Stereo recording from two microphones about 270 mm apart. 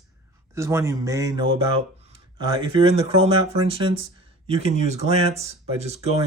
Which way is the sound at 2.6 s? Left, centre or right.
Right.